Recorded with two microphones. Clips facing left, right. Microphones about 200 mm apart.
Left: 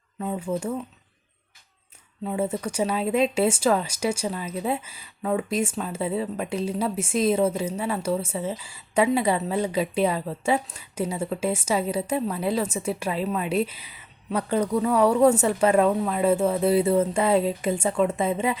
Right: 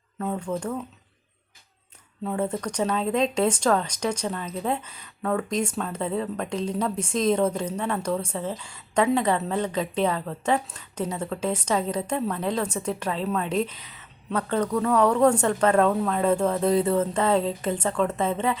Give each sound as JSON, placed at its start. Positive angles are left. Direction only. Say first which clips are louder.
{"t": 0.2, "sound": "speech", "louder": "left 1 dB", "side_deg": 5}
{"t": 2.2, "sound": "speech", "louder": "left 1 dB", "side_deg": 5}